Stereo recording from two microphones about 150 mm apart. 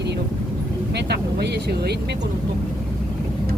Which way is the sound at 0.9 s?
90° right.